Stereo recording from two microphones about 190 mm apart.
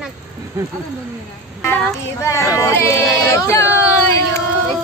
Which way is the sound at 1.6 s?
10° left (ahead or behind).